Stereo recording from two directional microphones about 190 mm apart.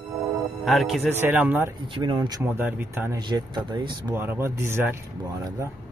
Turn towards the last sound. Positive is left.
turn(degrees=-15)  # may be behind; listen again after turning